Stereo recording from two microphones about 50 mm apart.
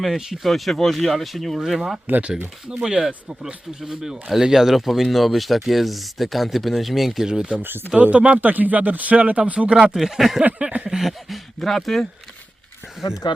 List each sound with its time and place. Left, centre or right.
0.0 s speech: centre
2.6 s speech: centre
7.3 s speech: centre
7.6 s speech: right
8.1 s speech: right
8.4 s speech: right; by 9.9 s centre
9.9 s speech: centre
10.6 s a sound: right
10.8 s speech: centre
13.0 s speech: centre